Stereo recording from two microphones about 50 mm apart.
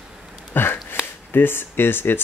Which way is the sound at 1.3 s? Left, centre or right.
Left.